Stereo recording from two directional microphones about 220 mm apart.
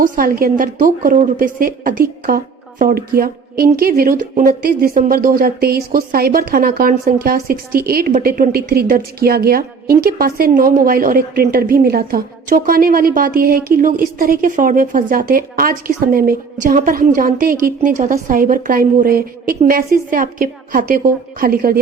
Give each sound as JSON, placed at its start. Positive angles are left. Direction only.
{"t": 0.0, "sound": "a woman's voice", "side_deg": -40}